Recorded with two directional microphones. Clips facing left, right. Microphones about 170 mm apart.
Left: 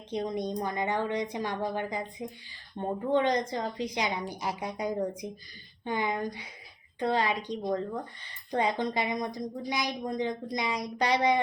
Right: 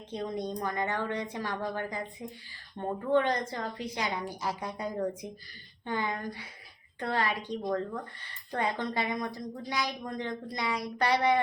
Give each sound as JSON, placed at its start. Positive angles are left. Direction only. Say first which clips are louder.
{"t": 0.1, "sound": "speech", "louder": "left 3 dB", "side_deg": 15}